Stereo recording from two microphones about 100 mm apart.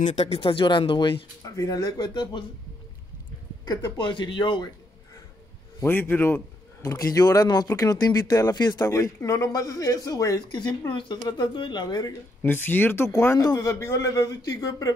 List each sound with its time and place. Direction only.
0.1 s speech: 85° left; by 1.1 s 55° left (ahead or behind)
1.4 s speech: 35° left (ahead or behind)
3.6 s speech: 45° left (ahead or behind)
5.9 s a man's voice: 20° left (ahead or behind)
6.8 s speech: 35° left (ahead or behind)
10.9 s speech: 50° left (ahead or behind)
12.4 s a man's voice: 20° left (ahead or behind); by 15.0 s 35° left (ahead or behind)